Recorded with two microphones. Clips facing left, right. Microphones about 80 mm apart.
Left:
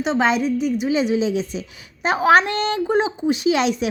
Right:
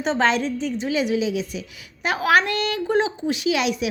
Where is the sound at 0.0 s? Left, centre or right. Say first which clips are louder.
Left 2 dB; centre.